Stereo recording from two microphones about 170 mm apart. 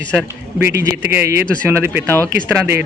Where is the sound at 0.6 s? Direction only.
15° right (ahead or behind).